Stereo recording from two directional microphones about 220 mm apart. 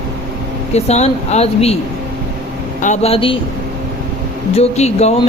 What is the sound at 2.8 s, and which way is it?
Speech, 30° left (ahead or behind).